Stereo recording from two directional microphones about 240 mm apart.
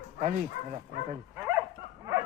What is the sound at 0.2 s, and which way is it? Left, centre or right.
Speech, right.